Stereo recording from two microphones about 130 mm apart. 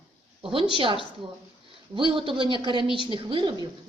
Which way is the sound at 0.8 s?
45° right (ahead or behind).